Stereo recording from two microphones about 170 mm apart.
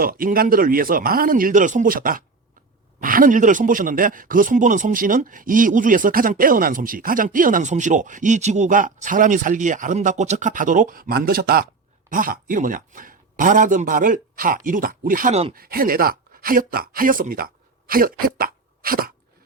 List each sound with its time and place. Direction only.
0.0 s speech: 55° right (ahead or behind)